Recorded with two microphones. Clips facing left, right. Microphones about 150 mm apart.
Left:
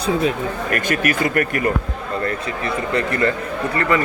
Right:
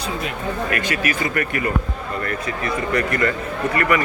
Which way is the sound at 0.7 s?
50° left (ahead or behind).